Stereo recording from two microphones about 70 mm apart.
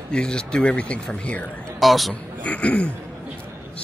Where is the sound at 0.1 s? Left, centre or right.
Centre.